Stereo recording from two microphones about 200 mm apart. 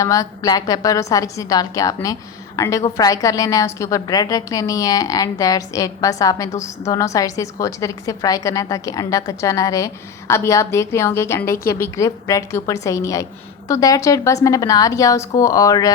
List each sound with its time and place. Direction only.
0.0 s a woman's voice: 15° left (ahead or behind)